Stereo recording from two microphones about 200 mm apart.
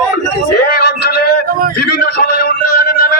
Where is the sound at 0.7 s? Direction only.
50° left (ahead or behind).